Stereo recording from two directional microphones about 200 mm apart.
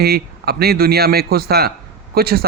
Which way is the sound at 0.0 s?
50° right (ahead or behind).